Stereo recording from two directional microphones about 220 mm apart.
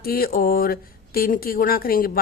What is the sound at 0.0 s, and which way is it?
Speech, 45° left (ahead or behind).